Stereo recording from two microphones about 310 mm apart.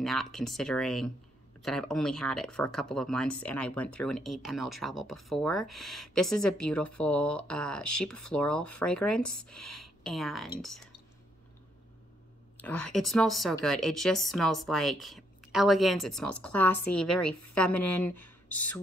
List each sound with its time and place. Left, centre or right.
0.0 s speech: centre
9.2 s speech: left
10.0 s speech: centre
12.5 s speech: centre
18.1 s a sound: left